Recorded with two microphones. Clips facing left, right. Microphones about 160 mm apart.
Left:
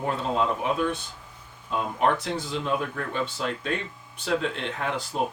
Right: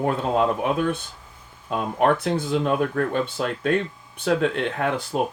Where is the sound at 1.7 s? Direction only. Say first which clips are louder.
Right 4 dB; 55° right (ahead or behind).